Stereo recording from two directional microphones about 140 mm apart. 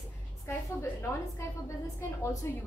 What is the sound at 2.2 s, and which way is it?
Speech, 20° left (ahead or behind).